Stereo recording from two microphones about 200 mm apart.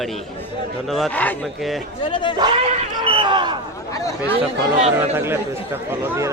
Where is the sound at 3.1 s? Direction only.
25° right (ahead or behind).